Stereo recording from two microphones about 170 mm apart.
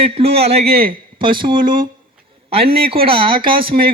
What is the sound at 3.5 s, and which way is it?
Speech, 60° right (ahead or behind).